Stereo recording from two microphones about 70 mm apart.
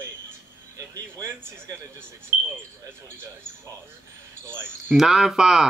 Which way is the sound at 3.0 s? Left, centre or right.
Right.